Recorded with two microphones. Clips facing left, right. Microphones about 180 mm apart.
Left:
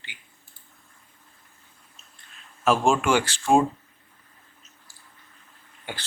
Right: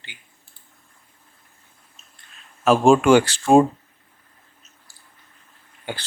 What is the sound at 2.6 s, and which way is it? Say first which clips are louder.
Speech: right 7 dB; 40° right (ahead or behind).